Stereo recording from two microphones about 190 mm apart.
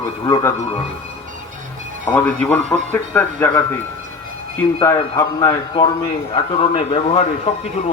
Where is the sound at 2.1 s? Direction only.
10° left (ahead or behind).